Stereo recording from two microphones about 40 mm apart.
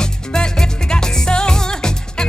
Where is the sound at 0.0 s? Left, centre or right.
Centre.